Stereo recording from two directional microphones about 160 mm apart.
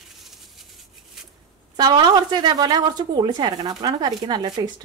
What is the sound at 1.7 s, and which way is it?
A woman's voice, 25° right (ahead or behind).